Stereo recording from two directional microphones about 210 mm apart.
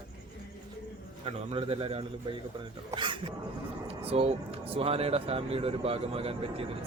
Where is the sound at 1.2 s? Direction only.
25° right (ahead or behind).